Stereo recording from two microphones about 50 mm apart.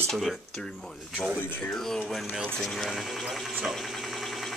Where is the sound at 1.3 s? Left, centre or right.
Left.